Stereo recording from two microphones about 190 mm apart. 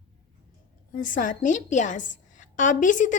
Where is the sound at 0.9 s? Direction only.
45° left (ahead or behind).